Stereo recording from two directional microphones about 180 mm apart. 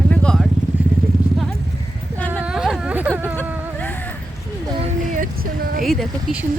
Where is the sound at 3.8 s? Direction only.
10° left (ahead or behind).